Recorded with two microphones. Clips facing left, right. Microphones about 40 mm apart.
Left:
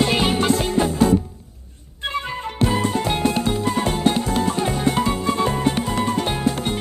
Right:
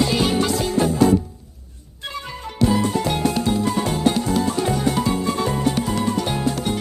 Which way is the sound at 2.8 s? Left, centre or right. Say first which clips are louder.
Even; centre.